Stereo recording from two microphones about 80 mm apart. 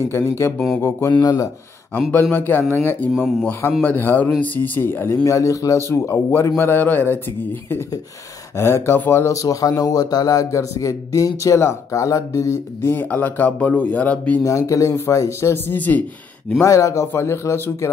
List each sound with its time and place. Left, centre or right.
0.7 s a man's voice: left
1.2 s speech: left
2.3 s a man's voice: left
3.1 s speech: centre
3.8 s a man's voice: left
5.2 s a man's voice: left
9.3 s speech: left
12.9 s a man's voice: left
14.4 s a man's voice: left; by 16.6 s centre
16.6 s a man's voice: left